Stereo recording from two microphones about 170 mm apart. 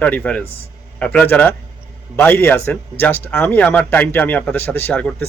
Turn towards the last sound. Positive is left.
turn(degrees=10)  # may be behind; listen again after turning